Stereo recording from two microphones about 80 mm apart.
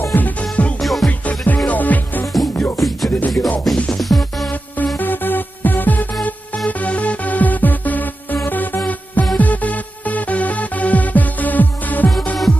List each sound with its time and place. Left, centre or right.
0.1 s music: centre
0.7 s music: centre
1.0 s music: centre
4.9 s music: left